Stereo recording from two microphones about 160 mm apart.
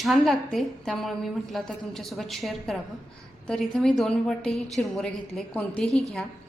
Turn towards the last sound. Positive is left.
turn(degrees=0)  # may be behind; listen again after turning